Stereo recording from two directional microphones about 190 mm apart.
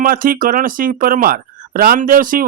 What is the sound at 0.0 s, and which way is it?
Speech, 45° right (ahead or behind).